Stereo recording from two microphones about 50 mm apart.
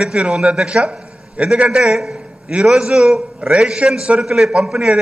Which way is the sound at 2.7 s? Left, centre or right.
Centre.